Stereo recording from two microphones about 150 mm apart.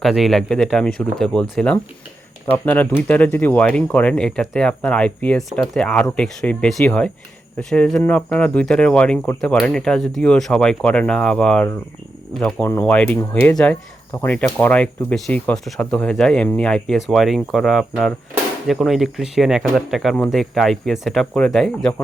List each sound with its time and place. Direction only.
0.0 s speech: centre (ahead or behind)
14.1 s speech: 20° left (ahead or behind)
14.3 s speech: 10° left (ahead or behind)
18.3 s a sound: 15° right (ahead or behind)
18.7 s speech: centre (ahead or behind)